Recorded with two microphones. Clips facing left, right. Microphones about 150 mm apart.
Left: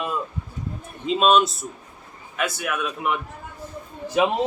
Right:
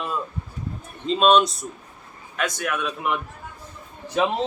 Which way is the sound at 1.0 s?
5° left (ahead or behind).